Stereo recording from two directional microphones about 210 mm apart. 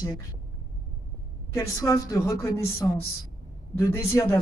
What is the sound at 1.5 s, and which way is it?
Speech, 15° left (ahead or behind).